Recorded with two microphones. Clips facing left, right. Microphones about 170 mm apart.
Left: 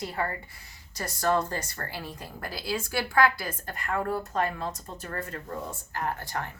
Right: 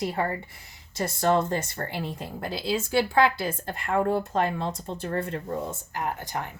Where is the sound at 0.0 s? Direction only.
20° right (ahead or behind).